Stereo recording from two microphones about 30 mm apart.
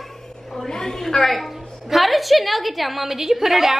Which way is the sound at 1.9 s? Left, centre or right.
Centre.